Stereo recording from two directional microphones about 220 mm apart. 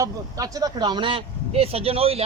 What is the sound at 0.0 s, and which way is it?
A man's voice, 15° right (ahead or behind).